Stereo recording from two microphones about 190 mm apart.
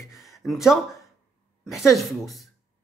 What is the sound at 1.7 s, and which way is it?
Speech, centre (ahead or behind).